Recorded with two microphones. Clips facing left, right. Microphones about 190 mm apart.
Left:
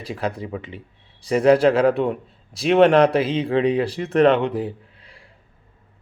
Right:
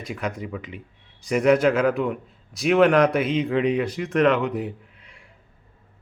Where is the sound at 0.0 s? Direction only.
30° left (ahead or behind).